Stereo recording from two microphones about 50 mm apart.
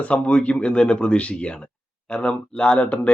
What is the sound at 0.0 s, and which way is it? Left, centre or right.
Speech, left.